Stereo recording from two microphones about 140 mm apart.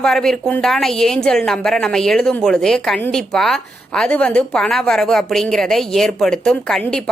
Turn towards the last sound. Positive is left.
turn(degrees=5)  # may be behind; listen again after turning